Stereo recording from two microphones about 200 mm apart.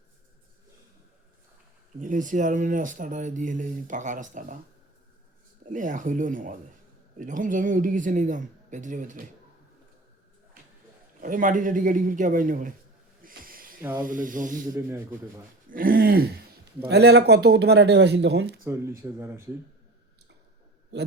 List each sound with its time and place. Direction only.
2.0 s speech: 40° right (ahead or behind)
5.7 s speech: 40° right (ahead or behind)
11.2 s speech: 40° right (ahead or behind)
13.2 s snort: 45° right (ahead or behind)
14.0 s speech: 40° right (ahead or behind)
14.7 s speech: 10° right (ahead or behind)
15.7 s throat clearing: 45° right (ahead or behind)
16.9 s speech: 55° right (ahead or behind)
19.0 s speech: 10° right (ahead or behind)